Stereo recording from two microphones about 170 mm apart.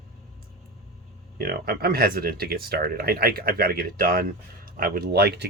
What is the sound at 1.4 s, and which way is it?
Speech, 65° right (ahead or behind).